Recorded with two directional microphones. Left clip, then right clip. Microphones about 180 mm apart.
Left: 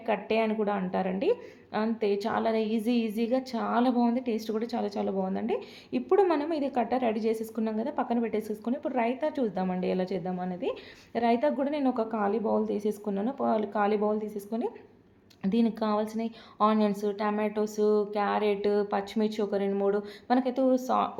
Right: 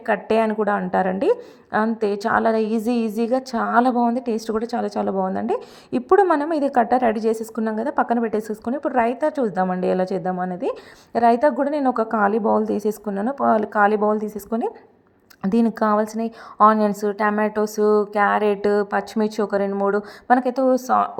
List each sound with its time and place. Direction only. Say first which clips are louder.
0.0 s a woman's voice: right 8 dB; 40° right (ahead or behind)